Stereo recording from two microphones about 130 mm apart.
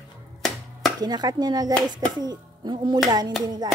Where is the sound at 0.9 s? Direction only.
30° right (ahead or behind).